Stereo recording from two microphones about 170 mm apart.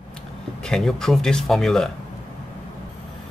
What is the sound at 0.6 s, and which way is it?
Speech, 5° left (ahead or behind).